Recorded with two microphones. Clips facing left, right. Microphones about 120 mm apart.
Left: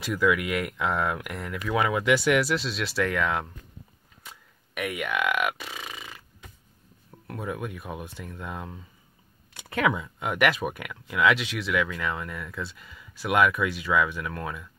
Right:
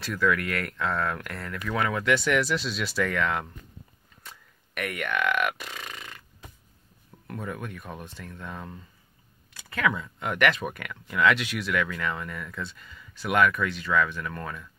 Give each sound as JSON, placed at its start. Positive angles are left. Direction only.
{"t": 0.0, "sound": "speech", "side_deg": 10}
{"t": 7.2, "sound": "speech", "side_deg": 5}
{"t": 9.5, "sound": "speech", "side_deg": 25}
{"t": 9.9, "sound": "speech", "side_deg": 10}